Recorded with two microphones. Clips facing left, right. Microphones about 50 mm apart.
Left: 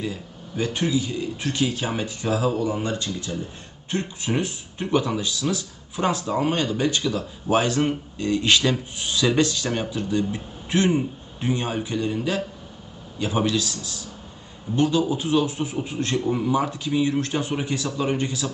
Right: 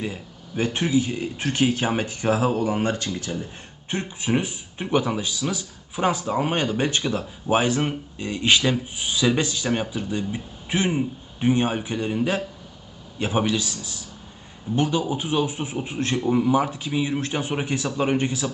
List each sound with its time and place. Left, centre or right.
0.0 s speech: right
6.5 s speech: right